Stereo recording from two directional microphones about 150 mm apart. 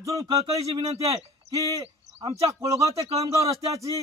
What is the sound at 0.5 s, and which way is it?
A man's voice, 40° right (ahead or behind).